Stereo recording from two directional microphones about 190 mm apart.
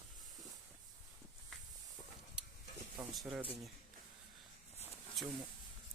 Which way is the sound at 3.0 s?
Centre (ahead or behind).